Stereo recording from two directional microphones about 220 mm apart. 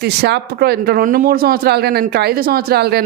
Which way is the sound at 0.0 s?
50° right (ahead or behind).